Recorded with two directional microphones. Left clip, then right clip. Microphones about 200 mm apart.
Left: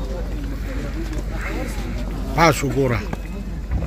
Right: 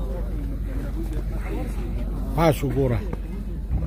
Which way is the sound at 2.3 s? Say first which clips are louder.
Left 5 dB; 10° right (ahead or behind).